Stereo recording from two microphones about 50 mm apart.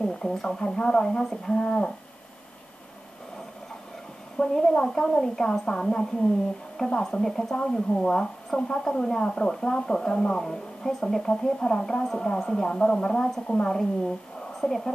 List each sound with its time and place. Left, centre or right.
0.0 s a woman's voice: centre
4.4 s a woman's voice: centre